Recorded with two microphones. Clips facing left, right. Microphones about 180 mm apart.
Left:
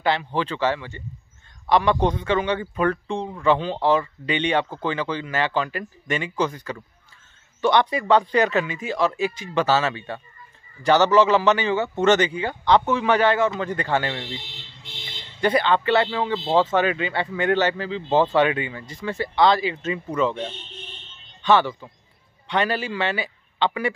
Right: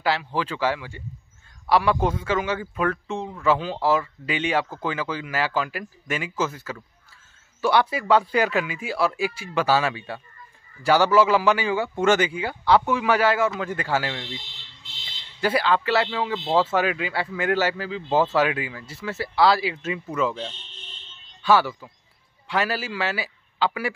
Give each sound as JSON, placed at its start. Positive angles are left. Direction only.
{"t": 0.0, "sound": "speech", "side_deg": -5}
{"t": 15.0, "sound": "a sound", "side_deg": 50}
{"t": 15.4, "sound": "speech", "side_deg": -5}
{"t": 21.4, "sound": "a man's voice", "side_deg": -5}